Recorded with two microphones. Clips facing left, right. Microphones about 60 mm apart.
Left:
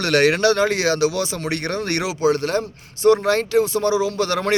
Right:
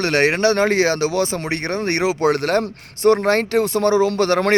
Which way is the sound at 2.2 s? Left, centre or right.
Right.